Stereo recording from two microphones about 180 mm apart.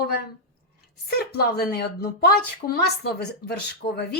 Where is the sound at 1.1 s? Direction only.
60° left (ahead or behind).